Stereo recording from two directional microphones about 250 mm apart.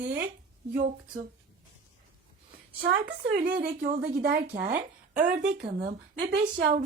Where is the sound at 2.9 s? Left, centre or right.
Right.